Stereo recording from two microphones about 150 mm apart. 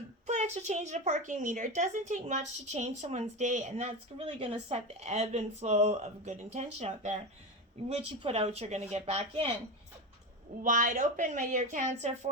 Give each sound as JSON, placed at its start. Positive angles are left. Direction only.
{"t": 0.3, "sound": "a woman's voice", "side_deg": -50}
{"t": 10.6, "sound": "a woman's voice", "side_deg": -60}